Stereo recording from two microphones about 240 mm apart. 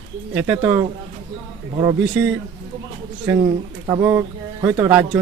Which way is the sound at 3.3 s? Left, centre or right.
Centre.